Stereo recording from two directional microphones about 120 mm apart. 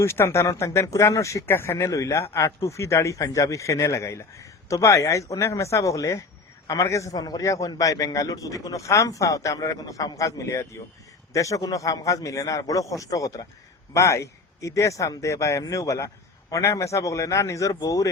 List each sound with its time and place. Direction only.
0.0 s a man's voice: 20° left (ahead or behind)